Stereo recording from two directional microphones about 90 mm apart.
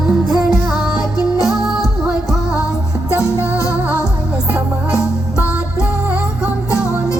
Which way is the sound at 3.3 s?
25° right (ahead or behind).